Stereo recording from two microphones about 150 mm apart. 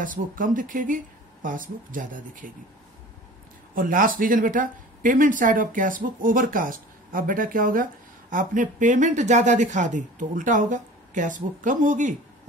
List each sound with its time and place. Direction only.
0.0 s speech: 65° right (ahead or behind)
3.7 s speech: 65° right (ahead or behind)